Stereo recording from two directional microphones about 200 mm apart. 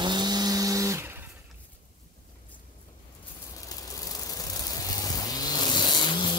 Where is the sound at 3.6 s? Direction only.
15° left (ahead or behind).